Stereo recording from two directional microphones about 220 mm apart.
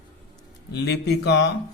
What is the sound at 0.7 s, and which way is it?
Speech, 50° left (ahead or behind).